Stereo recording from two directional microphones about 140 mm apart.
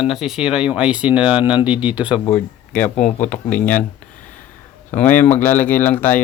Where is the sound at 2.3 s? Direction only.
10° left (ahead or behind).